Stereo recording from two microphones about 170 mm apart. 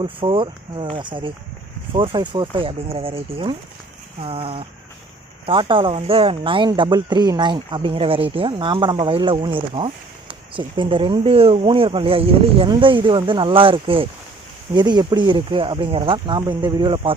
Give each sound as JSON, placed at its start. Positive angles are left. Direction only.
{"t": 0.0, "sound": "speech", "side_deg": -30}